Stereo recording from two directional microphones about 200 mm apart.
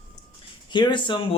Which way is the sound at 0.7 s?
20° left (ahead or behind).